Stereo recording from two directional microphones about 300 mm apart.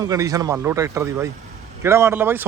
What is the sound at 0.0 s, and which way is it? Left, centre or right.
Speech, centre.